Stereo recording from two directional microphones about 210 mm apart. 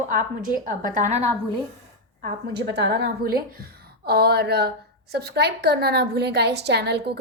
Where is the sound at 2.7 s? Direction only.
50° right (ahead or behind).